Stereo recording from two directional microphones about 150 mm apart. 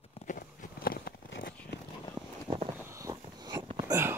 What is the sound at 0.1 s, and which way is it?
Walk, 55° left (ahead or behind).